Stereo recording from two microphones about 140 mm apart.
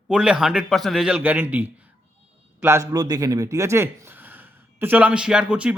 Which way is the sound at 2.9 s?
30° right (ahead or behind).